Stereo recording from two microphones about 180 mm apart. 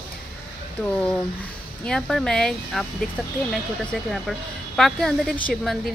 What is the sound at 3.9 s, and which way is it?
Speech, centre (ahead or behind).